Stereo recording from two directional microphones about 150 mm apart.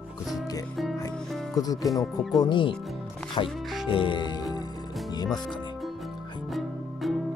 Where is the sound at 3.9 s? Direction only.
35° left (ahead or behind).